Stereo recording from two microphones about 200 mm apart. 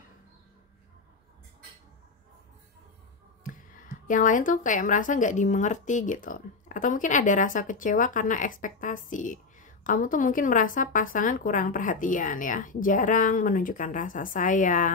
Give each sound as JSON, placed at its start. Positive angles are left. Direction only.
{"t": 3.4, "sound": "speech", "side_deg": 40}